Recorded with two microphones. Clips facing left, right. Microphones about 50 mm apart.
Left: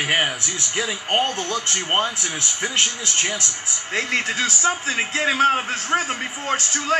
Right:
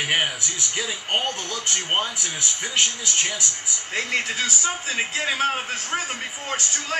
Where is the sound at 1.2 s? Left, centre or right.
Left.